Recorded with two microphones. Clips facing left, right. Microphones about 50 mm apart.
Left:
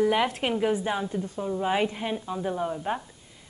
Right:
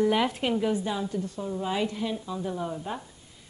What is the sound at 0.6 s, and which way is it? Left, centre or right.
Speech, left.